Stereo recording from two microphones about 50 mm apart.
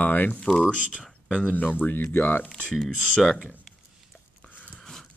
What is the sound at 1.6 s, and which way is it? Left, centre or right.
Speech, left.